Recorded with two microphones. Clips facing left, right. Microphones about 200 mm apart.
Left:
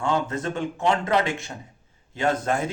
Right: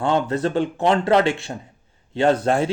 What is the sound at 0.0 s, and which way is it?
A man's voice, 35° right (ahead or behind).